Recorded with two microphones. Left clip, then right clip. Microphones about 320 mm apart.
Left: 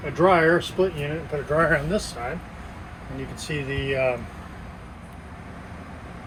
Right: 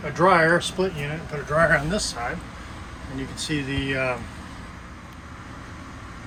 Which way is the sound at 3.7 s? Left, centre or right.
Right.